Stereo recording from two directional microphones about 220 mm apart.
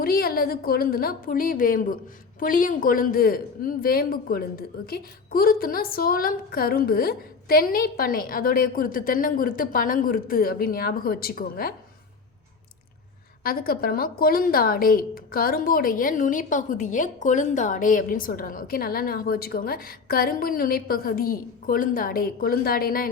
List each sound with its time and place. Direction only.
0.0 s a woman's voice: 45° left (ahead or behind)
13.4 s a woman's voice: 40° left (ahead or behind)